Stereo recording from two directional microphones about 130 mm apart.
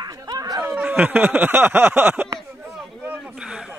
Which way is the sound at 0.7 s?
10° right (ahead or behind).